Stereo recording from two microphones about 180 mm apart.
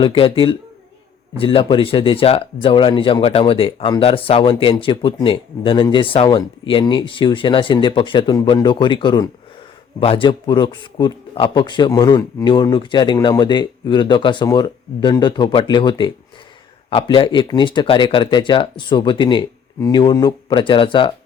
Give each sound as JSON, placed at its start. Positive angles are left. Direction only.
{"t": 0.0, "sound": "speech", "side_deg": 30}